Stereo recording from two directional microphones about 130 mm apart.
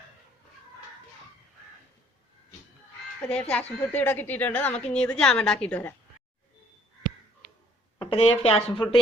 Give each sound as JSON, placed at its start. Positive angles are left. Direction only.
{"t": 3.2, "sound": "a woman's voice", "side_deg": 5}
{"t": 7.9, "sound": "speech", "side_deg": 50}